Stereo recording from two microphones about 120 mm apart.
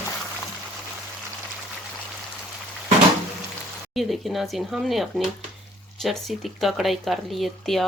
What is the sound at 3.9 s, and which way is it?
Speech, centre (ahead or behind).